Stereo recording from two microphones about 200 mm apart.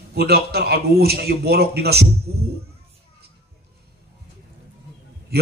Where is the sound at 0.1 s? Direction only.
50° right (ahead or behind).